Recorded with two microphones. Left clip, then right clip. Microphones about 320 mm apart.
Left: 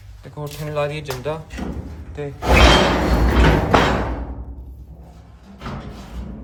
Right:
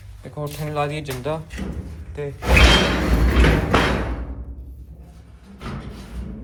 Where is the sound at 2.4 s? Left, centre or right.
Left.